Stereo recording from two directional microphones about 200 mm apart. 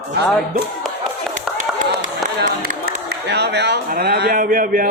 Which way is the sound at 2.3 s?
50° right (ahead or behind).